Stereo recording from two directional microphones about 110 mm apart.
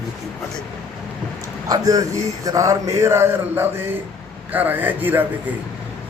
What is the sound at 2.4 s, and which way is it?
Mantra, 30° right (ahead or behind).